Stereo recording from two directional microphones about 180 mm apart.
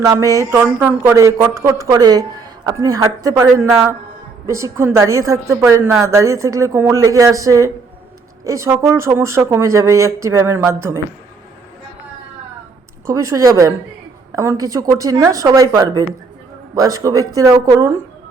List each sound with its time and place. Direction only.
0.0 s speech: 15° right (ahead or behind)
13.1 s speech: 15° right (ahead or behind)